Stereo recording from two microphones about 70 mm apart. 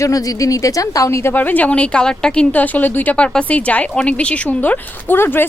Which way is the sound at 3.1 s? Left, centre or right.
Centre.